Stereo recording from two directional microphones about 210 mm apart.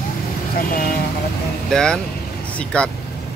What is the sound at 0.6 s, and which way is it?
Speech, 45° left (ahead or behind).